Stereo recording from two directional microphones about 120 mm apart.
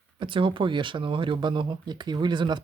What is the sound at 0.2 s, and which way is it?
Speech, 45° right (ahead or behind).